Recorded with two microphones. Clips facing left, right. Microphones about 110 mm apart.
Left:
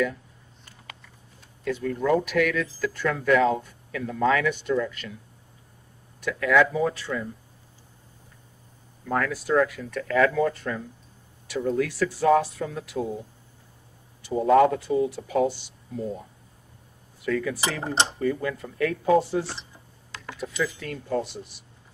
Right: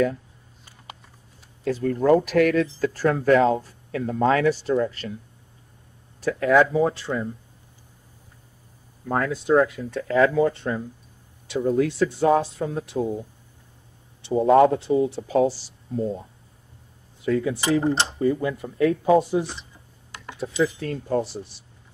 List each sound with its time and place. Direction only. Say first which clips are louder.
1.6 s speech: right 4 dB; 40° right (ahead or behind)
6.2 s speech: right 3 dB; 35° right (ahead or behind)
9.0 s speech: right 2 dB; 25° right (ahead or behind)
14.2 s speech: right 2 dB; 30° right (ahead or behind)
17.2 s speech: right 3 dB; 25° right (ahead or behind)